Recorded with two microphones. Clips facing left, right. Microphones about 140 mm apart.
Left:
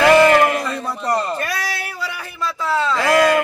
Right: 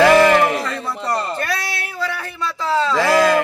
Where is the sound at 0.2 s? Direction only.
Centre (ahead or behind).